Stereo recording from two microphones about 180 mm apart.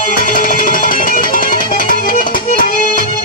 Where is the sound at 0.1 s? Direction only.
50° left (ahead or behind).